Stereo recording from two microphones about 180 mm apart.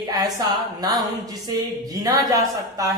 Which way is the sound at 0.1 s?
20° right (ahead or behind).